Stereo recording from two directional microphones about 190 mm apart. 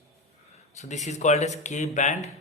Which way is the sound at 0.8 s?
40° left (ahead or behind).